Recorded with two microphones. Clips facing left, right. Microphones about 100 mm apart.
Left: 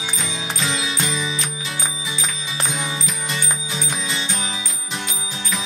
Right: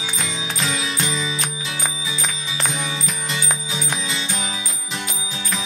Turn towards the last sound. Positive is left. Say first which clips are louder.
# even
turn(degrees=0)  # may be behind; listen again after turning